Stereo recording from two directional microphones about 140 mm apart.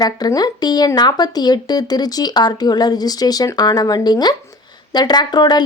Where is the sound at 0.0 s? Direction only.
25° left (ahead or behind).